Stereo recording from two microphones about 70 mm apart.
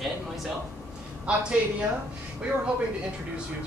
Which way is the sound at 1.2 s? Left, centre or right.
Centre.